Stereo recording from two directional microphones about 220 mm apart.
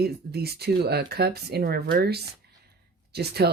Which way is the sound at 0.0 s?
45° right (ahead or behind).